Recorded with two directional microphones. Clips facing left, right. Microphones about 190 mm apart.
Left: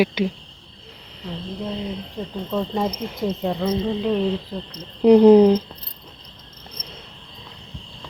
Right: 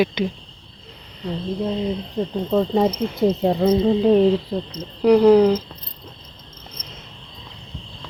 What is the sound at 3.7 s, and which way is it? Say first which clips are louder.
Cricket: right 8 dB; 40° right (ahead or behind).